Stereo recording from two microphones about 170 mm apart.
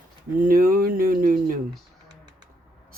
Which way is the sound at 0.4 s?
55° right (ahead or behind).